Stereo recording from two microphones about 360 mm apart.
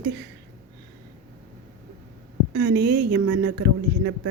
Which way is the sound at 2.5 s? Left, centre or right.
Right.